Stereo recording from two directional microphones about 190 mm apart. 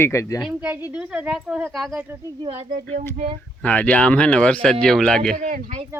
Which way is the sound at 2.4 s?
30° right (ahead or behind).